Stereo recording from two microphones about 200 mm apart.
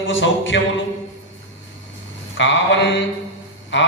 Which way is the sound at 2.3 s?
65° left (ahead or behind).